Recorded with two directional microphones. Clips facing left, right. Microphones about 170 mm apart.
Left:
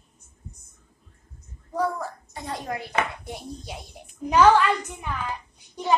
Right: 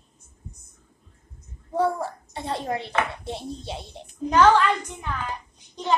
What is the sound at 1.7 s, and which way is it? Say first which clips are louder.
A child's voice: right 3 dB; 30° right (ahead or behind).